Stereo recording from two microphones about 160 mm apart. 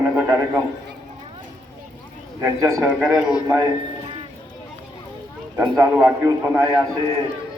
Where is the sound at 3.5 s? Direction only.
20° right (ahead or behind).